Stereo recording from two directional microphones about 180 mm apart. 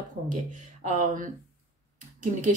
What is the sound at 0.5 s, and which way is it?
Speech, 45° right (ahead or behind).